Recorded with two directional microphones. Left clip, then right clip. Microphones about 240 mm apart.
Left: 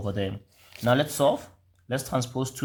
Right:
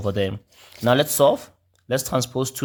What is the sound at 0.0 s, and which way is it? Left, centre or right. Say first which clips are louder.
Speech: right 7 dB; right.